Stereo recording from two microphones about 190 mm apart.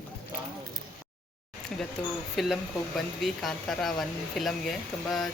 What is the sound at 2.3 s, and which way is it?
Speech, centre (ahead or behind).